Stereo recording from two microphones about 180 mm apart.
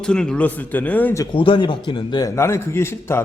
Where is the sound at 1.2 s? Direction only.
30° left (ahead or behind); by 3.2 s 15° left (ahead or behind).